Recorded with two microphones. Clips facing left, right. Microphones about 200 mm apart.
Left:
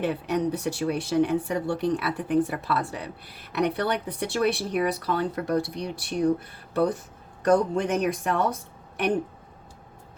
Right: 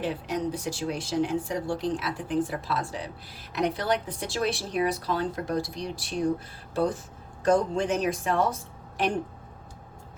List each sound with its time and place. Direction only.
0.0 s speech: 60° left (ahead or behind)